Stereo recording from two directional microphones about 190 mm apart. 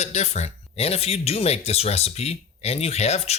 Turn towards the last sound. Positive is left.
turn(degrees=35)  # may be behind; listen again after turning